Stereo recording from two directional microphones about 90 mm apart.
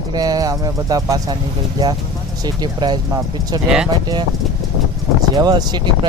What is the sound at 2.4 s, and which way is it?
Speech, 50° right (ahead or behind).